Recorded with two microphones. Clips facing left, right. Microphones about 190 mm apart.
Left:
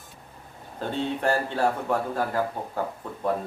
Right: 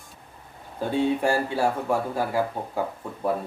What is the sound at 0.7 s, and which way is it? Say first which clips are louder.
Speech: right 5 dB; 10° right (ahead or behind).